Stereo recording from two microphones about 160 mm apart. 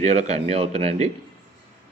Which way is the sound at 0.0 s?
40° right (ahead or behind).